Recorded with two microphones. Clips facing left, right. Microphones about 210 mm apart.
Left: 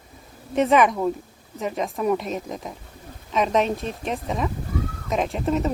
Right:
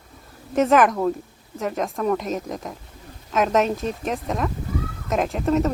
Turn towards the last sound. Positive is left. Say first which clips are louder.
# right 2 dB
turn(degrees=0)  # may be behind; listen again after turning